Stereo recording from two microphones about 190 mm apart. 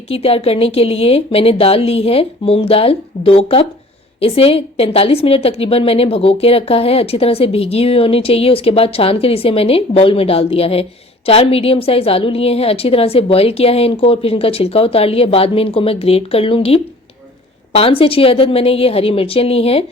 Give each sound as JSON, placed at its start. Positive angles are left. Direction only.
{"t": 0.1, "sound": "a woman's voice", "side_deg": 30}